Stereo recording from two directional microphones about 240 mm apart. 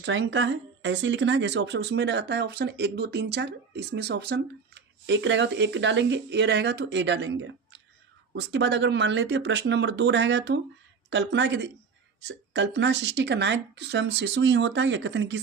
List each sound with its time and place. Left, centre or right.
0.0 s speech: right